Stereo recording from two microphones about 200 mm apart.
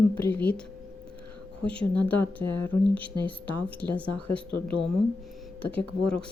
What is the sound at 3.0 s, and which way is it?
Speech, 25° right (ahead or behind).